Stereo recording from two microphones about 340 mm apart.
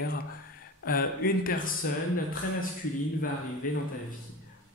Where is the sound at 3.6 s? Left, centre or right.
Left.